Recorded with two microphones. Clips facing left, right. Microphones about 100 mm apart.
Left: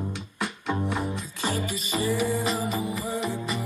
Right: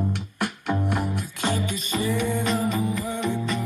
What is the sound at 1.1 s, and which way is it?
Music, 60° right (ahead or behind).